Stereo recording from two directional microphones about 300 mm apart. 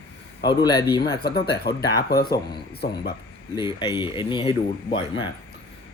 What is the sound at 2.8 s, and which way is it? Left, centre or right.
Speech, left.